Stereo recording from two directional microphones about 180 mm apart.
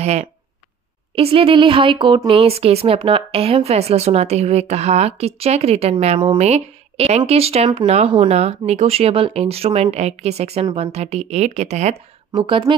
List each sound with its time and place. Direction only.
0.0 s a woman's voice: 35° right (ahead or behind)